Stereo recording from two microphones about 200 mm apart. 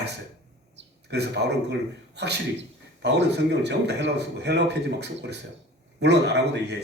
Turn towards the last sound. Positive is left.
turn(degrees=-60)  # may be behind; listen again after turning